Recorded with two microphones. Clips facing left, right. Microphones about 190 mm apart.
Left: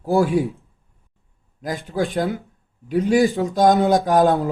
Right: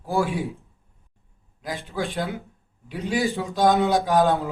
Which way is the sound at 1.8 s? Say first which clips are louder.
Left 6 dB; 40° left (ahead or behind).